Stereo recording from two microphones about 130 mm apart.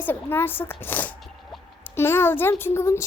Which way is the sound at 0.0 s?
15° left (ahead or behind).